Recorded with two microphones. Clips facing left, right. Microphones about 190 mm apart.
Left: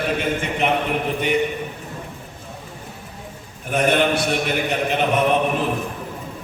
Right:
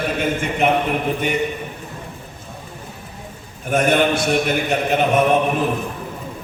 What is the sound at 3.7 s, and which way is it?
Speech, 45° right (ahead or behind).